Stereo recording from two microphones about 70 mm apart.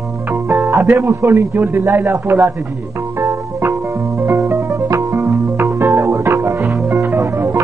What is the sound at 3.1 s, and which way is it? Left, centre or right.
Music, right.